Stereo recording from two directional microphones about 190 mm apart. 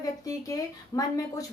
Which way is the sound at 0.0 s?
20° left (ahead or behind).